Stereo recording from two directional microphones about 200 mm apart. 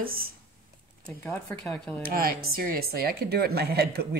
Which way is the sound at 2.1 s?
45° right (ahead or behind).